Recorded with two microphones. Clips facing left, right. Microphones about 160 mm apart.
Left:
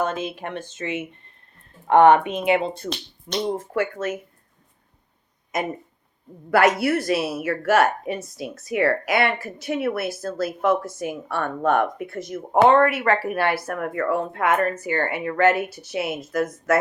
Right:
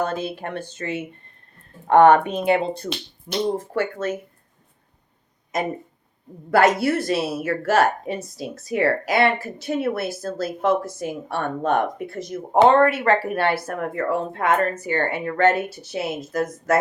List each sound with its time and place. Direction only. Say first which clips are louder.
0.0 s speech: even; 35° right (ahead or behind)
3.6 s speech: even; 30° right (ahead or behind)
6.5 s a woman's voice: right 1 dB; 25° right (ahead or behind)
10.8 s speech: even; 20° left (ahead or behind)
11.3 s a woman's voice: left 1 dB; 25° right (ahead or behind)